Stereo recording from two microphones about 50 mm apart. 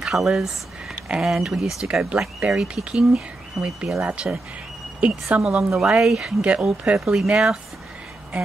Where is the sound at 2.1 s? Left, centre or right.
Right.